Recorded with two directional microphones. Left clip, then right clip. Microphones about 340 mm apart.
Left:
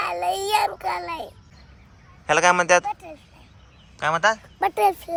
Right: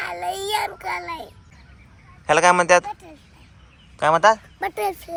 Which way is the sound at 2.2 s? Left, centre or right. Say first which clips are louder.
Right 2 dB; centre.